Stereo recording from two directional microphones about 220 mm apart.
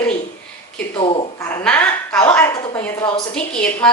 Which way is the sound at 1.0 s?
25° left (ahead or behind).